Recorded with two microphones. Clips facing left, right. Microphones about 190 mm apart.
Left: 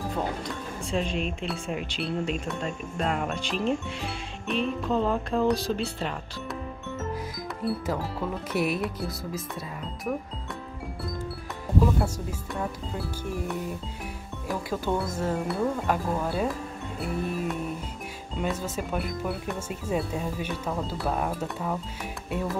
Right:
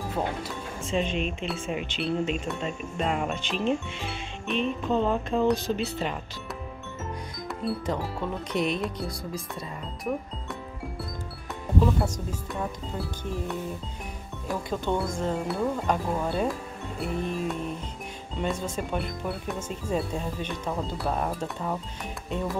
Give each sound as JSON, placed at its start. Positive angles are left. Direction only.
{"t": 0.5, "sound": "speech", "side_deg": 0}
{"t": 7.6, "sound": "speech", "side_deg": 5}
{"t": 11.8, "sound": "speech", "side_deg": 0}
{"t": 14.5, "sound": "speech", "side_deg": 0}